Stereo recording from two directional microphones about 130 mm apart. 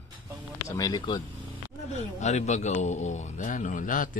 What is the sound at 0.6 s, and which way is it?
Speech, 30° left (ahead or behind).